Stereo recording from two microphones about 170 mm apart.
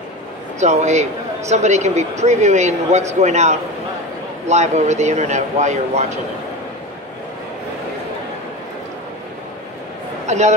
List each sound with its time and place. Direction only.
0.6 s a man's voice: 40° right (ahead or behind)
10.2 s a man's voice: 40° right (ahead or behind)